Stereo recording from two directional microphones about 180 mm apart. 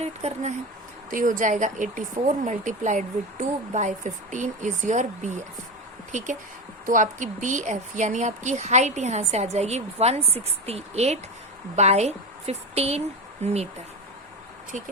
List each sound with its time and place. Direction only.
0.0 s a woman's voice: 35° right (ahead or behind)